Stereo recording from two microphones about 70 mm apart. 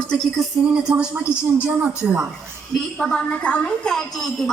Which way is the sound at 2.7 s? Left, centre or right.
Centre.